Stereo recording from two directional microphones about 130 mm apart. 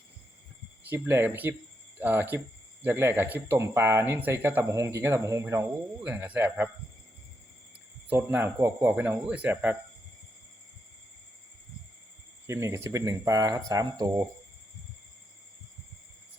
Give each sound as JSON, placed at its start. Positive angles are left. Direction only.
{"t": 0.9, "sound": "speech", "side_deg": -15}
{"t": 8.1, "sound": "speech", "side_deg": -15}
{"t": 12.5, "sound": "speech", "side_deg": -20}